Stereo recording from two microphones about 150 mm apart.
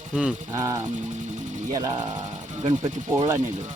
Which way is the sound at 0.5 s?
20° right (ahead or behind).